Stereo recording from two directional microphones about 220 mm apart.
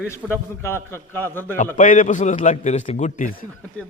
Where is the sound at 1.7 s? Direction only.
35° left (ahead or behind).